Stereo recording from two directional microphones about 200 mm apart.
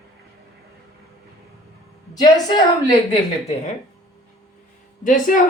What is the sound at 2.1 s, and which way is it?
Speech, 20° left (ahead or behind).